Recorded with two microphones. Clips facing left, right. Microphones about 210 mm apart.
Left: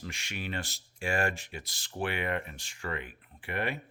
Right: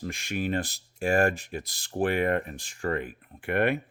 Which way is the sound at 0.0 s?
50° right (ahead or behind).